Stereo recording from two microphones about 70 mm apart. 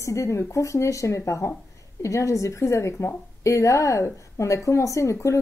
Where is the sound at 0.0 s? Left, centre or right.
Left.